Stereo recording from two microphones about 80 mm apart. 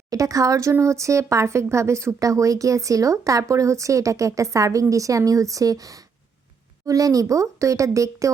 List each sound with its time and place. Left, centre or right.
0.1 s speech: right